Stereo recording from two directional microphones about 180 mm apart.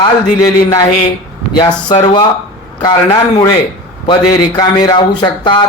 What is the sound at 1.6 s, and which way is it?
A man's voice, 25° left (ahead or behind).